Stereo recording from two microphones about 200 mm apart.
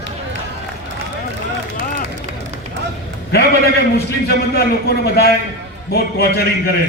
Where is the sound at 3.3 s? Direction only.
55° left (ahead or behind).